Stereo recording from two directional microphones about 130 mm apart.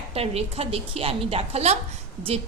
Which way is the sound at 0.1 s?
50° right (ahead or behind).